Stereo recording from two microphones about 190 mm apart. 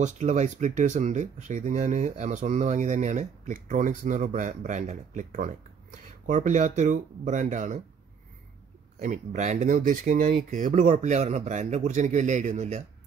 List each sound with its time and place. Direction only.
0.0 s speech: 40° right (ahead or behind)
9.0 s speech: 40° right (ahead or behind)